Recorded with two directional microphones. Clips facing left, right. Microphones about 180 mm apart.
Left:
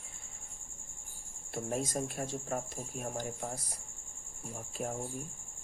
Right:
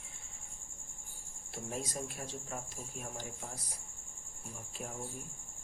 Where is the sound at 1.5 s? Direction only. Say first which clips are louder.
Left 6 dB; 45° left (ahead or behind).